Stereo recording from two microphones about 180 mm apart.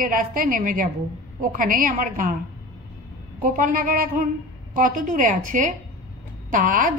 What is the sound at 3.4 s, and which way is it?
A woman's voice, 50° right (ahead or behind).